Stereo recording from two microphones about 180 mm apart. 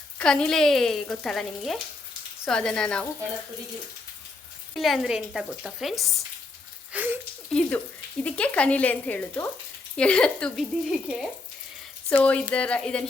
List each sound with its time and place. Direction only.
0.2 s frying: 5° left (ahead or behind)
4.7 s frying: centre (ahead or behind)
6.9 s a sound: 10° right (ahead or behind)
7.6 s a sound: 5° left (ahead or behind)
8.2 s speech: 5° left (ahead or behind)
10.0 s frying: 5° left (ahead or behind)
12.2 s speech: 5° left (ahead or behind)